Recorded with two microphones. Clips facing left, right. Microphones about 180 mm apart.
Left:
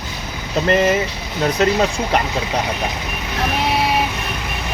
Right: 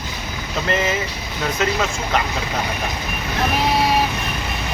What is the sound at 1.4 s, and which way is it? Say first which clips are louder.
Speech: left 5 dB; 40° left (ahead or behind).